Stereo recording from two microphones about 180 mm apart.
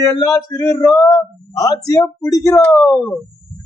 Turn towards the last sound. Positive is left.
turn(degrees=10)  # may be behind; listen again after turning